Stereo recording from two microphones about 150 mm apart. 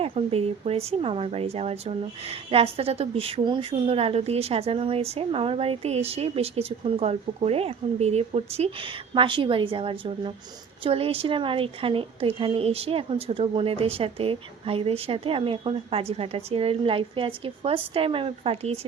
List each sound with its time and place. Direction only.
0.0 s speech: 40° right (ahead or behind)